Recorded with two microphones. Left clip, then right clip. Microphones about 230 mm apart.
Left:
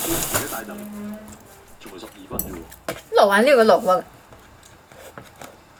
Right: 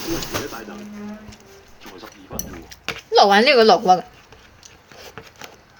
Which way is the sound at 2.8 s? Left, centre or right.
Right.